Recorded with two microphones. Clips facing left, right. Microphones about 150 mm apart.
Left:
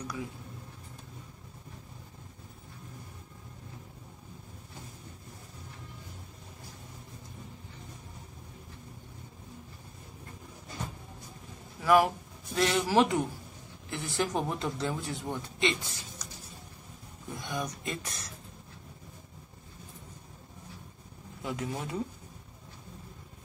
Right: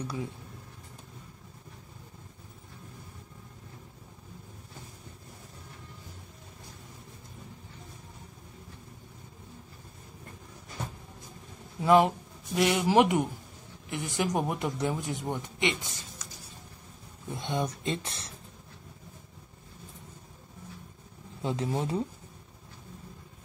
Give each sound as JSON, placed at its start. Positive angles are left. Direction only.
{"t": 0.0, "sound": "speech", "side_deg": -30}
{"t": 11.8, "sound": "speech", "side_deg": -25}
{"t": 17.3, "sound": "speech", "side_deg": -25}
{"t": 21.4, "sound": "speech", "side_deg": -30}